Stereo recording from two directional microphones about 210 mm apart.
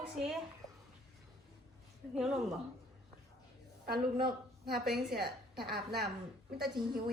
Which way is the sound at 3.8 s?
45° right (ahead or behind).